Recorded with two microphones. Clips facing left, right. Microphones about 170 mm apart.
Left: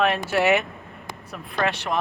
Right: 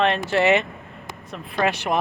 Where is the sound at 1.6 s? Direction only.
15° right (ahead or behind).